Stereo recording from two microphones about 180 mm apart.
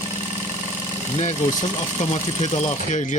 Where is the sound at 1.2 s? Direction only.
40° left (ahead or behind).